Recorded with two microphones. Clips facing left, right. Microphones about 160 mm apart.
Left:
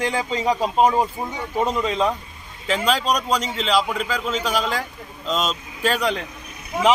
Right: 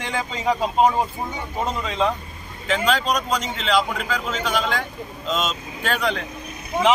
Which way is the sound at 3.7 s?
10° left (ahead or behind).